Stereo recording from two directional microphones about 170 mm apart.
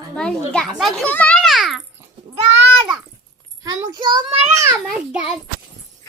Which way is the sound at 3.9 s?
25° right (ahead or behind).